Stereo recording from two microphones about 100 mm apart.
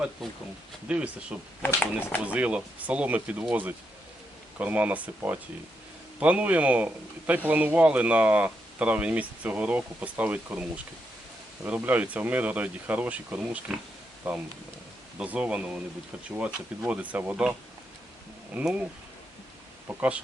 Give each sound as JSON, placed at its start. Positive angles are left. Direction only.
{"t": 0.9, "sound": "a man's voice", "side_deg": -10}
{"t": 1.6, "sound": "speech", "side_deg": 20}
{"t": 2.2, "sound": "a man's voice", "side_deg": -15}
{"t": 18.5, "sound": "a man's voice", "side_deg": -15}
{"t": 19.9, "sound": "speech", "side_deg": -15}